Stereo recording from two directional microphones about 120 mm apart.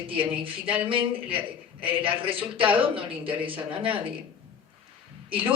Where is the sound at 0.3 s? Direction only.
45° right (ahead or behind).